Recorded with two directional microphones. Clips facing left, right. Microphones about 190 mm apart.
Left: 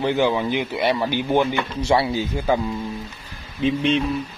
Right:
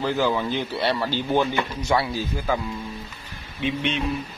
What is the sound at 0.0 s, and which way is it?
Speech, 20° left (ahead or behind).